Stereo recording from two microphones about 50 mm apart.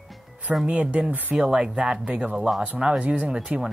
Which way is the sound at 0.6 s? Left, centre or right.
Right.